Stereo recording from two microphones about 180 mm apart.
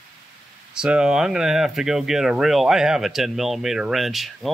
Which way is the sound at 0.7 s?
5° right (ahead or behind).